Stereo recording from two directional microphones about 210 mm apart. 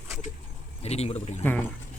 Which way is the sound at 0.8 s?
30° left (ahead or behind).